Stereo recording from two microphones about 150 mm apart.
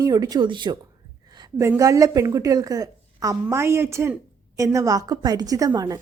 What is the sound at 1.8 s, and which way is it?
A woman's voice, 20° right (ahead or behind).